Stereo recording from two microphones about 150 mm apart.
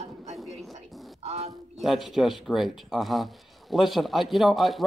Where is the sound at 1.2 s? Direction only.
45° right (ahead or behind).